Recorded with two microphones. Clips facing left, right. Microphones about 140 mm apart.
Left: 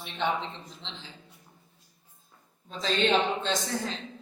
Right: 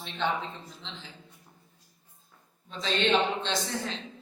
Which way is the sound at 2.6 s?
45° left (ahead or behind).